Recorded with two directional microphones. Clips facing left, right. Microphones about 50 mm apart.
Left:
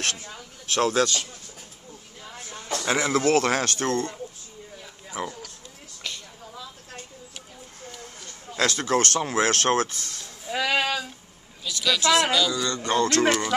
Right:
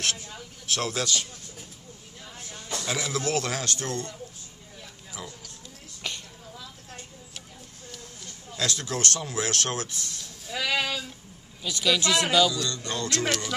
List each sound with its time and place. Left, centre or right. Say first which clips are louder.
0.7 s speech: left 7 dB; left
2.7 s speech: left 7 dB; left
5.1 s speech: left 9 dB; left
6.0 s a sound: even; centre
8.5 s speech: left 7 dB; left
10.6 s speech: left 3 dB; left
11.6 s speech: even; centre
12.0 s speech: left 3 dB; left
13.3 s speech: left 6 dB; centre